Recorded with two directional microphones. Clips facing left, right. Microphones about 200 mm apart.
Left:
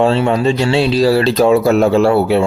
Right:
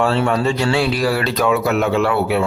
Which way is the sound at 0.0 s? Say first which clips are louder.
Left 4 dB; 20° left (ahead or behind).